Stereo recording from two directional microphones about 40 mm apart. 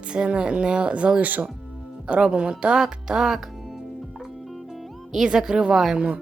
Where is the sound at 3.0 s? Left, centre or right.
Centre.